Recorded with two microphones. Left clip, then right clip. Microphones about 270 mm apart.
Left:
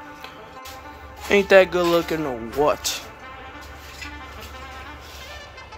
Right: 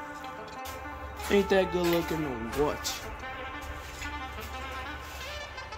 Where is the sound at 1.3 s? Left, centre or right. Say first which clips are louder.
Left 10 dB; centre.